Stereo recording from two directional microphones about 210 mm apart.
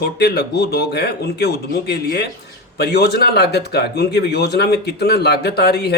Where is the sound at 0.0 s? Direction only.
50° left (ahead or behind).